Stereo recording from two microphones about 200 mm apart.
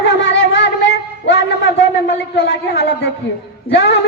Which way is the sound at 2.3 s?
55° left (ahead or behind).